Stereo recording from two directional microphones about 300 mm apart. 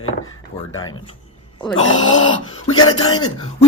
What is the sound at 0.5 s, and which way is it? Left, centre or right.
Speech, left.